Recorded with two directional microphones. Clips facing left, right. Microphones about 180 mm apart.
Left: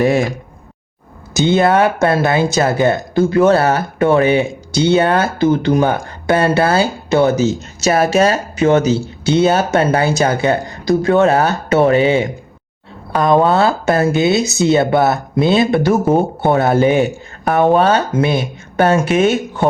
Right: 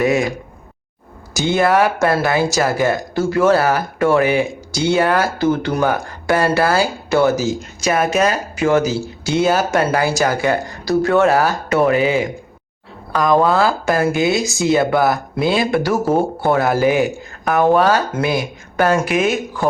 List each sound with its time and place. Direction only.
1.4 s speech: 20° left (ahead or behind)